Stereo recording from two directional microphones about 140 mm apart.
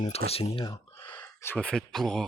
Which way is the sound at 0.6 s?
25° left (ahead or behind).